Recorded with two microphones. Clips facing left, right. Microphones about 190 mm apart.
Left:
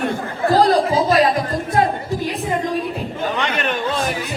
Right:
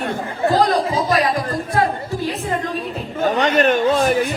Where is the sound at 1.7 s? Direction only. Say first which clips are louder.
Left 2 dB; 20° left (ahead or behind).